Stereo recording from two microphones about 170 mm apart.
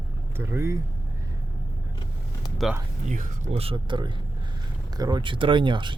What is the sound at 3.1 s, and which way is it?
Speech, 45° right (ahead or behind).